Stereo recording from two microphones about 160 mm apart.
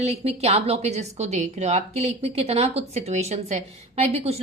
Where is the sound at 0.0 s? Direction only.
40° right (ahead or behind).